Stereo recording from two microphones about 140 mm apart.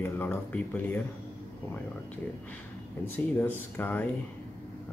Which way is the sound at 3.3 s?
15° left (ahead or behind).